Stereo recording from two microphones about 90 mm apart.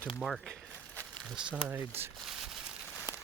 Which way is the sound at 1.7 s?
25° right (ahead or behind).